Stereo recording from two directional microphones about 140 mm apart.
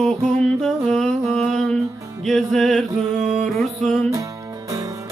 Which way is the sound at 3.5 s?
Centre (ahead or behind).